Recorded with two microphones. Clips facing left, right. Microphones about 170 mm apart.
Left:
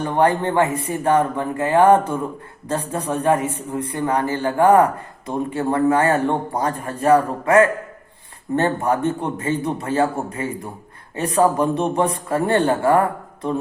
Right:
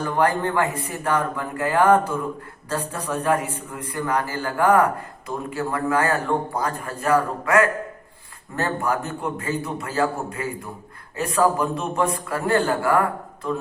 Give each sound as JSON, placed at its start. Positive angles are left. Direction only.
{"t": 0.0, "sound": "a man's voice", "side_deg": 25}